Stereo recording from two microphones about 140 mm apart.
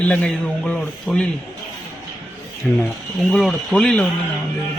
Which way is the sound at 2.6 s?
Centre (ahead or behind).